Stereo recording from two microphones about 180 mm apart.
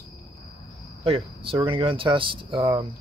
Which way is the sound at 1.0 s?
30° right (ahead or behind).